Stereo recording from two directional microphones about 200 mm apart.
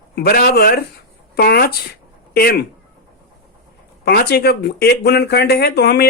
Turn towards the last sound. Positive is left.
turn(degrees=55)  # may be behind; listen again after turning